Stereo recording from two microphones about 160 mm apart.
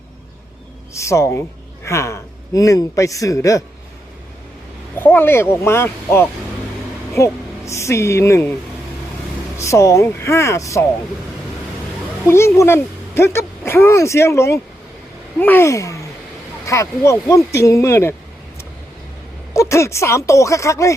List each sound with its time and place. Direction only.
0.9 s a man's voice: 20° left (ahead or behind)
4.9 s a woman's voice: 15° left (ahead or behind)
9.6 s speech: 20° left (ahead or behind)
12.2 s speech: 15° left (ahead or behind)
19.5 s speech: 20° left (ahead or behind)